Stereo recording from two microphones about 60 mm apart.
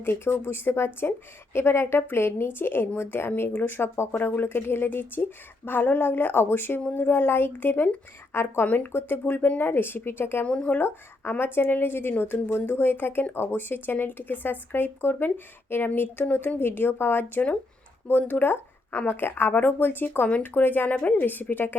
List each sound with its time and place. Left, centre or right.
0.0 s speech: left
8.6 s speech: left
8.9 s speech: left
10.4 s speech: left